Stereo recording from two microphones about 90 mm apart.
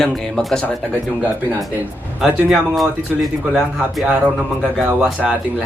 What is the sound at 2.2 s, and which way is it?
Speech, 5° right (ahead or behind).